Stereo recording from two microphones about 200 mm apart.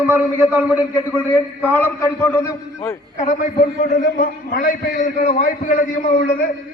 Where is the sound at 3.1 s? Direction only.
40° left (ahead or behind).